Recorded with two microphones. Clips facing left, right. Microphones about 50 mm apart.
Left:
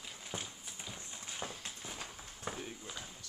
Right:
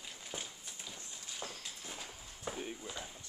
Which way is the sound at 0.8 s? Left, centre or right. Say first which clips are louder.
Left 3 dB; centre.